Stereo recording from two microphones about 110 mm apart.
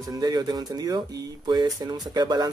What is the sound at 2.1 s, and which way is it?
Speech, 40° right (ahead or behind).